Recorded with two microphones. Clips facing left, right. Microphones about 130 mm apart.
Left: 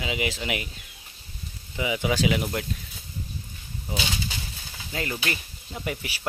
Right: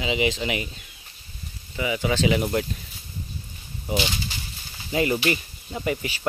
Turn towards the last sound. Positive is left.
turn(degrees=0)  # may be behind; listen again after turning